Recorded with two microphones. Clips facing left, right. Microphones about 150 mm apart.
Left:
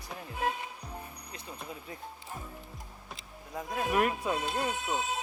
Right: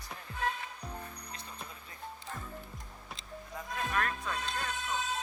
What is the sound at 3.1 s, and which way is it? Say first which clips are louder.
Speech: left 3 dB; 10° left (ahead or behind).